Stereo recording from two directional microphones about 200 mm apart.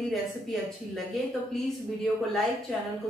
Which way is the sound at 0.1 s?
Centre (ahead or behind).